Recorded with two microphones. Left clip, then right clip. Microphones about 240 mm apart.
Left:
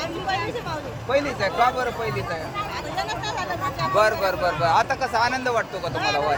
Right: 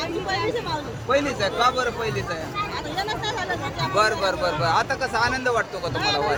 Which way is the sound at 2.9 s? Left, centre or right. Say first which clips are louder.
Even; centre.